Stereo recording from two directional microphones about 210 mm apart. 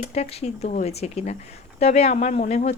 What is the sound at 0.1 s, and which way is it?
Speech, 30° left (ahead or behind).